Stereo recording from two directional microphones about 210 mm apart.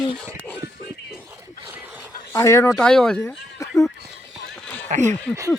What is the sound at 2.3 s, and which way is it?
Speech, 15° left (ahead or behind).